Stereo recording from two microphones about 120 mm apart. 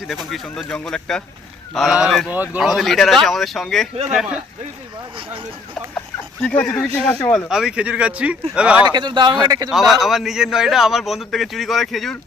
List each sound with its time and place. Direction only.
0.1 s a man's voice: centre (ahead or behind)
2.3 s speech: 15° right (ahead or behind)
2.6 s a man's voice: centre (ahead or behind)
6.4 s speech: 10° left (ahead or behind)
7.3 s speech: 5° right (ahead or behind)
8.9 s speech: 40° right (ahead or behind)
9.6 s a man's voice: centre (ahead or behind)